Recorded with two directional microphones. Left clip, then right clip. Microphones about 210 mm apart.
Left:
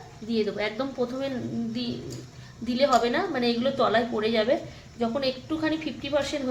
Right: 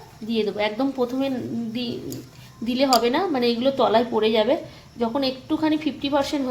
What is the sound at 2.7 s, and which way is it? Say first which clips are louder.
A woman's voice: right 3 dB; 25° right (ahead or behind).